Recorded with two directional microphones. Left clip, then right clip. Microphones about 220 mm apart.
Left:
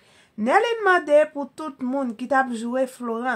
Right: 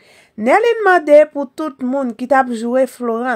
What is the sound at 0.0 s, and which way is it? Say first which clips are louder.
Speech: right 8 dB; 45° right (ahead or behind).